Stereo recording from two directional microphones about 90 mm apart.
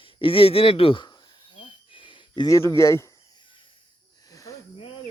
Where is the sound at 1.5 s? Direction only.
70° left (ahead or behind).